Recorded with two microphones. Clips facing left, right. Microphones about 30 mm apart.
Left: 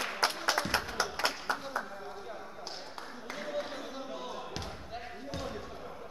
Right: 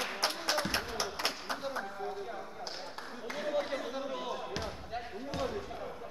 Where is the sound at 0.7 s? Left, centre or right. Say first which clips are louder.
Left 2 dB; left.